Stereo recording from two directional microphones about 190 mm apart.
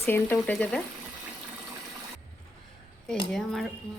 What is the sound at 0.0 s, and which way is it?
Speech, 10° left (ahead or behind).